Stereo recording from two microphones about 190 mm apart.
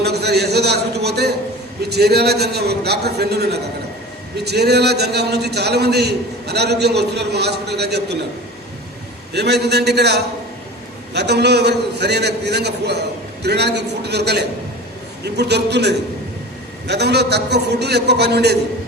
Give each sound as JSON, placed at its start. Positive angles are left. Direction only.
{"t": 0.0, "sound": "a man's voice", "side_deg": -60}
{"t": 9.3, "sound": "a man's voice", "side_deg": -60}